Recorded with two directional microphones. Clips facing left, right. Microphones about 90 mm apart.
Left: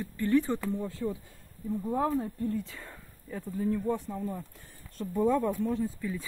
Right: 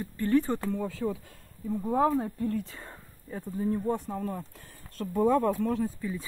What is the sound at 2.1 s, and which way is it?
Speech, 65° right (ahead or behind).